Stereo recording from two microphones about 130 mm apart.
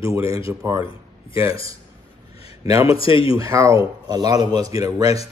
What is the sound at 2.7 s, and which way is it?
Speech, 25° right (ahead or behind).